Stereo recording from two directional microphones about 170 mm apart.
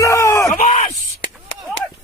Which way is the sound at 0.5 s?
50° left (ahead or behind).